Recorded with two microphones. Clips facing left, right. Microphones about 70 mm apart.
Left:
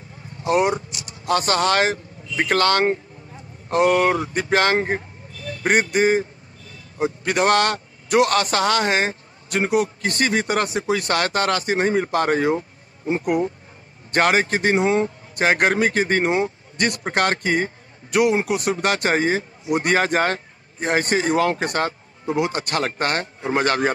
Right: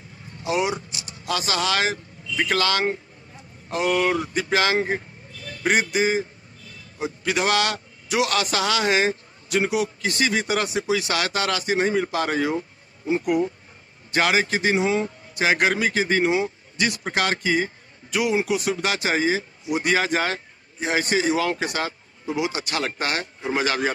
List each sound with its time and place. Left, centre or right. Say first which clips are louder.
0.4 s a man's voice: left 5 dB; left